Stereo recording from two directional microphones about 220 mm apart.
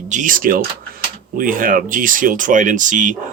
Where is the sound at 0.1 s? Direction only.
35° right (ahead or behind).